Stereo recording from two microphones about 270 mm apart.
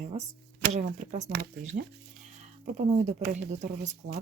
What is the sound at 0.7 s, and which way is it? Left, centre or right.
Speech, right.